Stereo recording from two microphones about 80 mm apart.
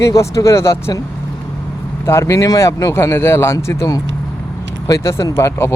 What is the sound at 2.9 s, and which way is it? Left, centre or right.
Speech, left.